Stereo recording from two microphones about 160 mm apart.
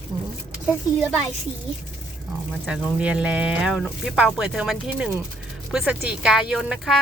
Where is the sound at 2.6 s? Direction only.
5° right (ahead or behind).